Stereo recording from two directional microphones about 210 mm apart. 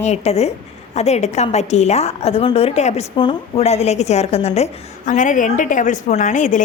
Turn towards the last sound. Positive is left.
turn(degrees=35)  # may be behind; listen again after turning